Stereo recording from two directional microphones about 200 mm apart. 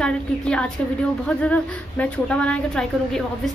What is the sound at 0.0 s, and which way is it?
A woman's voice, 5° left (ahead or behind).